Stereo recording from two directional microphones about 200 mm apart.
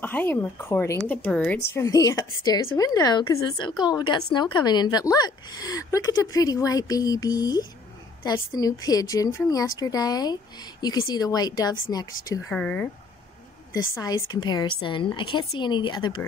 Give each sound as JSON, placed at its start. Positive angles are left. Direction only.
{"t": 0.0, "sound": "a woman's voice", "side_deg": 10}